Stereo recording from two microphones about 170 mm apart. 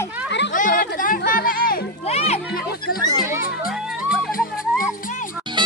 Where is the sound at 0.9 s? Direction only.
55° left (ahead or behind).